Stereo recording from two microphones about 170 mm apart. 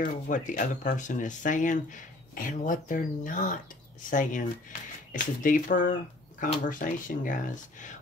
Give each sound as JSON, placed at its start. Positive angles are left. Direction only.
{"t": 0.0, "sound": "speech", "side_deg": 50}